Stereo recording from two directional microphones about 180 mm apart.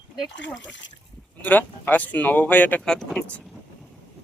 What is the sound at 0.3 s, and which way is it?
Speech, 90° left.